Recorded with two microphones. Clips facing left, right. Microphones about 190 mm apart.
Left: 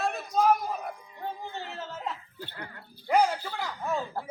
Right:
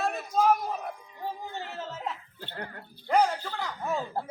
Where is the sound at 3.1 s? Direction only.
10° left (ahead or behind).